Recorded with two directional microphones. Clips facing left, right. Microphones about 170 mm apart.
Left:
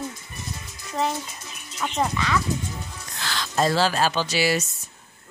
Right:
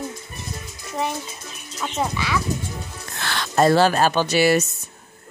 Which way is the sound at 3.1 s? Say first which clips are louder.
Right 4 dB; 60° right (ahead or behind).